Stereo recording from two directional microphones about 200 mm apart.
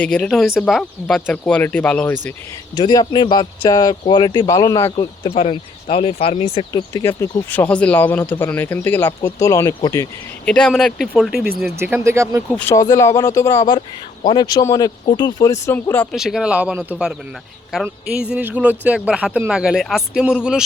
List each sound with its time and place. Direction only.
0.0 s speech: 5° left (ahead or behind)
2.7 s speech: 25° left (ahead or behind)
5.2 s speech: 25° left (ahead or behind)
6.7 s speech: 15° left (ahead or behind)
10.5 s speech: 5° left (ahead or behind); by 12.4 s 15° right (ahead or behind)
12.5 s speech: 10° left (ahead or behind)
16.1 s speech: centre (ahead or behind)
18.3 s speech: 5° right (ahead or behind)